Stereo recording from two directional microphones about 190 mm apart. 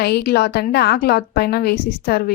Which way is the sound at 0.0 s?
60° left (ahead or behind).